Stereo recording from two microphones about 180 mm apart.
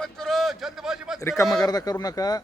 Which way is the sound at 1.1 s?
15° left (ahead or behind).